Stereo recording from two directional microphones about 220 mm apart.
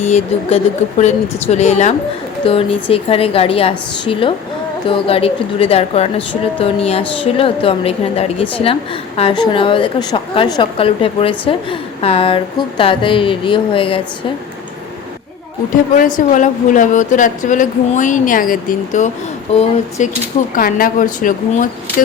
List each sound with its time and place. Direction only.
0.0 s a woman's voice: 30° left (ahead or behind)
16.0 s speech: 35° left (ahead or behind)